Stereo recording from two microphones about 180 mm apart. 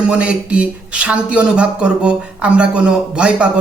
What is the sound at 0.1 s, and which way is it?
Speech, 5° right (ahead or behind).